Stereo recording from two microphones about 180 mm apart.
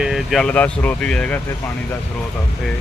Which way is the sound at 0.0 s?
Centre (ahead or behind).